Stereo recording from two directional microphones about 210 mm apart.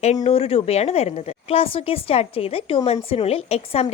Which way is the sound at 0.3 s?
25° left (ahead or behind).